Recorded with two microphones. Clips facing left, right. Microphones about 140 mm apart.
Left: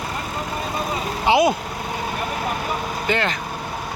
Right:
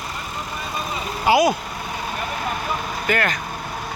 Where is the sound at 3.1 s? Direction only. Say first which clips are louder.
Even; 25° left (ahead or behind).